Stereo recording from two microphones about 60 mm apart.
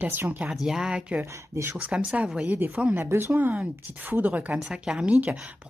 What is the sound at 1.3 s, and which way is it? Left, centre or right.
Speech, right.